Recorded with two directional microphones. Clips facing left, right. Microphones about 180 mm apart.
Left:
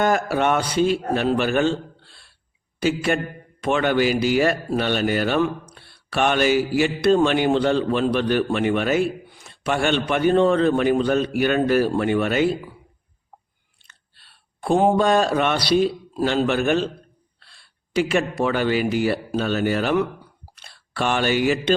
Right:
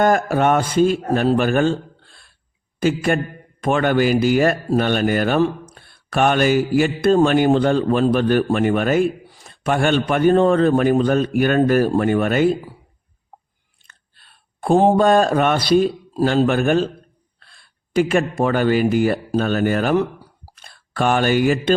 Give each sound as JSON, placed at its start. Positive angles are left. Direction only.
{"t": 0.0, "sound": "a man's voice", "side_deg": -45}
{"t": 13.8, "sound": "speech", "side_deg": -50}